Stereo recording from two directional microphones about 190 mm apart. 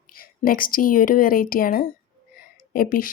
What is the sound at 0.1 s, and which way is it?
A woman's voice, 50° left (ahead or behind).